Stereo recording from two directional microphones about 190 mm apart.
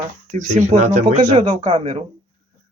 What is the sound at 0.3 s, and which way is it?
Speech, 40° right (ahead or behind).